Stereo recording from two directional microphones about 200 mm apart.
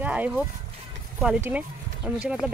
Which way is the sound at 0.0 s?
5° right (ahead or behind).